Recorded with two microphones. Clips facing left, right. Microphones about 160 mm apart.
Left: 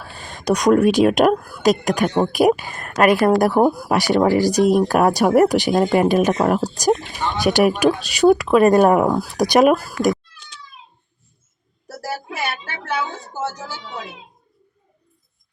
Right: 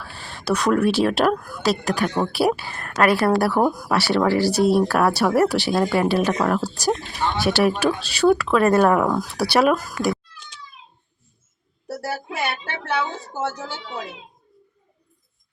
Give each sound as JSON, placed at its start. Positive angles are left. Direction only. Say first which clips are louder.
{"t": 0.0, "sound": "speech", "louder": "left 5 dB", "side_deg": 15}